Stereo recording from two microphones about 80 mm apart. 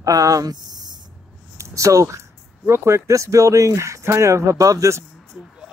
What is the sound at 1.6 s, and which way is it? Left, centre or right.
Speech, right.